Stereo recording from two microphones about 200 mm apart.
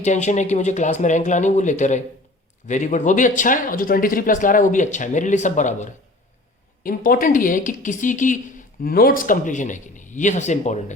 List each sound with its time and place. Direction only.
0.0 s a woman's voice: 35° left (ahead or behind)